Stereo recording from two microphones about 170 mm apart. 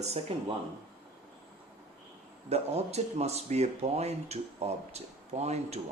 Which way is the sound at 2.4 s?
40° right (ahead or behind).